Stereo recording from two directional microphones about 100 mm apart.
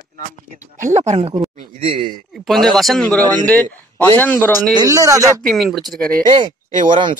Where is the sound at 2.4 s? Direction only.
Centre (ahead or behind); by 4.6 s 20° left (ahead or behind).